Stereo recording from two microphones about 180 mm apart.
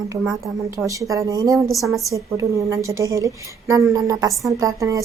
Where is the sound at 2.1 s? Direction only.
15° right (ahead or behind).